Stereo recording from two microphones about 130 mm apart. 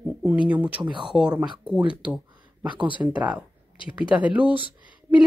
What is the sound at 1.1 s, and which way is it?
Speech, 5° right (ahead or behind).